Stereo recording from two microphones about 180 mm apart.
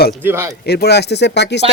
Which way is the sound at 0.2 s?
10° right (ahead or behind).